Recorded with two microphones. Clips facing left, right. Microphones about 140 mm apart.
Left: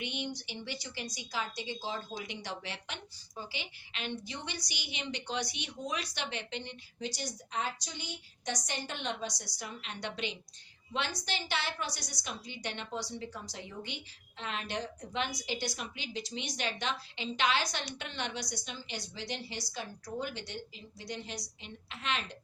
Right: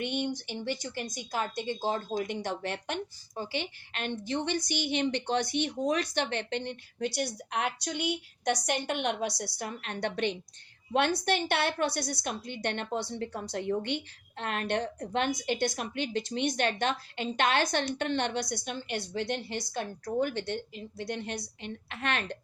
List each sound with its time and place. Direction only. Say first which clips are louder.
0.0 s a woman's voice: right 7 dB; 50° right (ahead or behind)